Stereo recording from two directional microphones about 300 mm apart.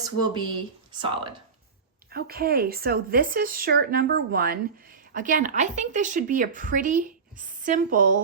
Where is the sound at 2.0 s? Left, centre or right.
Right.